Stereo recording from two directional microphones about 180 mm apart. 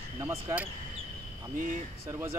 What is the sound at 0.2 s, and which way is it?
Speech, 15° right (ahead or behind).